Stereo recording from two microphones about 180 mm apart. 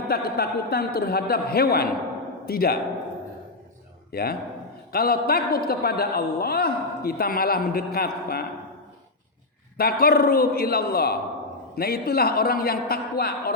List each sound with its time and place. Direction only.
0.1 s a man's voice: 60° left (ahead or behind)
4.1 s a man's voice: 60° left (ahead or behind)
9.7 s a man's voice: 55° left (ahead or behind)